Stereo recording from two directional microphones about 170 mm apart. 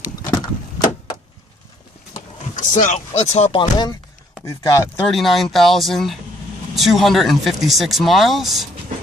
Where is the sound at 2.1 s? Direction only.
45° left (ahead or behind).